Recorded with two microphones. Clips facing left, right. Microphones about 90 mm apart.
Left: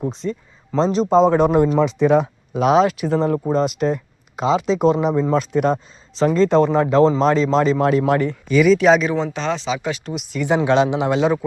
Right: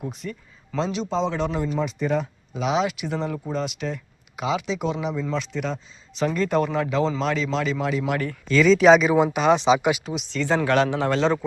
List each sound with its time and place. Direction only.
0.0 s speech: 30° left (ahead or behind)
0.9 s speech: 45° left (ahead or behind)
6.1 s speech: 30° left (ahead or behind)
8.2 s speech: 15° left (ahead or behind); by 10.0 s 15° right (ahead or behind)
10.1 s speech: 5° left (ahead or behind)